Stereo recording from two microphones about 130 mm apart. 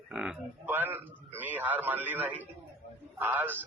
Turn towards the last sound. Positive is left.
turn(degrees=-15)  # may be behind; listen again after turning